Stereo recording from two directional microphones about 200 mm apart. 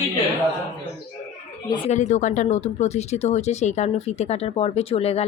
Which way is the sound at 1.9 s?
35° left (ahead or behind).